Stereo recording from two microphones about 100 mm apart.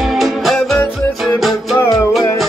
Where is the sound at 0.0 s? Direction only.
Centre (ahead or behind).